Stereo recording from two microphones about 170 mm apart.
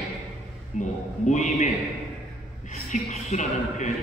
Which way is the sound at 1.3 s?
45° left (ahead or behind).